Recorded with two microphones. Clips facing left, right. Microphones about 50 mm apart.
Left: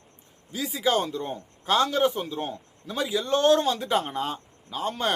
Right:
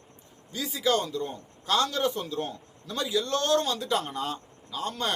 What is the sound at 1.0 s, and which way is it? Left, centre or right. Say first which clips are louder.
A man's voice: left 2 dB; left.